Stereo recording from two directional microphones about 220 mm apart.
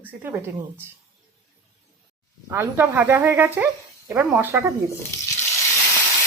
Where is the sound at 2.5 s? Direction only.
10° right (ahead or behind).